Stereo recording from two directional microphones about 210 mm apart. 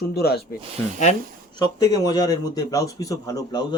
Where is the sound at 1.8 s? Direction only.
20° left (ahead or behind).